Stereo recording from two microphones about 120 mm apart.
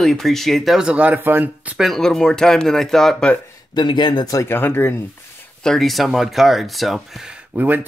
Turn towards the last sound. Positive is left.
turn(degrees=-15)  # may be behind; listen again after turning